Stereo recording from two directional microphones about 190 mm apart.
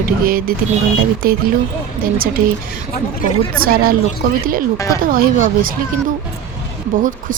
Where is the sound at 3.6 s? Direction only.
50° right (ahead or behind).